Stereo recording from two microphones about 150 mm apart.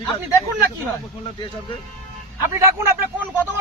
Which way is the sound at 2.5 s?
20° right (ahead or behind).